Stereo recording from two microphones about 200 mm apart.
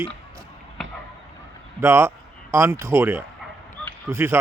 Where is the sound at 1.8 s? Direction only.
15° right (ahead or behind).